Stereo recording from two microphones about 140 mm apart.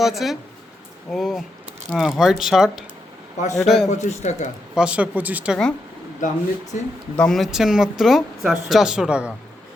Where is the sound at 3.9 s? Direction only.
55° left (ahead or behind).